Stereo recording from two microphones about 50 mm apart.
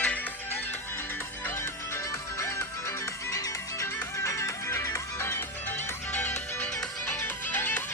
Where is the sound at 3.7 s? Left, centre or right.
Left.